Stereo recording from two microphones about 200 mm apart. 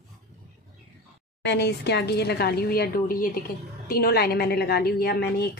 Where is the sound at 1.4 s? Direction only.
55° left (ahead or behind).